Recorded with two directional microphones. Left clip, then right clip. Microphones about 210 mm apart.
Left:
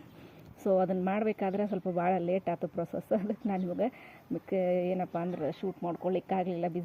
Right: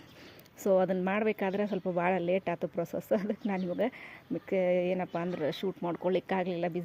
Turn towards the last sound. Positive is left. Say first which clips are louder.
# even
turn(degrees=-15)  # may be behind; listen again after turning